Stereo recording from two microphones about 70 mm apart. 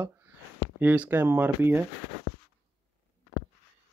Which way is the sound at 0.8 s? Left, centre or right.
Right.